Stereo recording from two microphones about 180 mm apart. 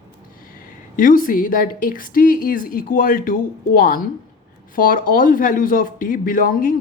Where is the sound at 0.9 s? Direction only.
50° left (ahead or behind).